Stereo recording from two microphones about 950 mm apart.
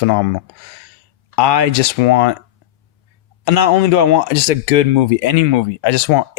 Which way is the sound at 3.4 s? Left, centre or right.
Left.